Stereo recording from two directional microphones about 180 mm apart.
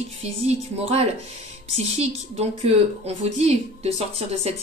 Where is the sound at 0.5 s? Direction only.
35° right (ahead or behind).